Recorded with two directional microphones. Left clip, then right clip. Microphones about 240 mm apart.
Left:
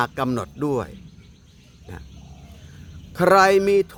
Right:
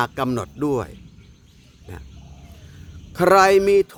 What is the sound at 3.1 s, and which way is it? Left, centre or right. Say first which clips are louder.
Speech: right 1 dB; centre.